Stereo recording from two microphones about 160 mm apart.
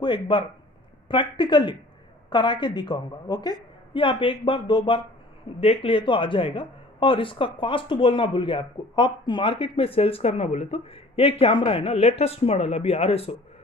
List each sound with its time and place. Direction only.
0.0 s a woman's voice: 30° left (ahead or behind)